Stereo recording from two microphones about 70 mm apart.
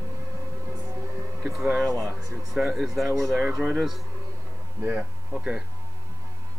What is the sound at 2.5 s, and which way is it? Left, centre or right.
Speech, centre.